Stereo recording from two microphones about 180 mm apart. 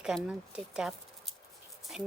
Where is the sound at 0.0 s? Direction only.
5° right (ahead or behind).